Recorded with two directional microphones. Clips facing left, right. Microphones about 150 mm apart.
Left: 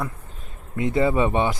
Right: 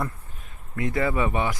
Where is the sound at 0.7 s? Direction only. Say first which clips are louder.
Left 4 dB; 25° left (ahead or behind).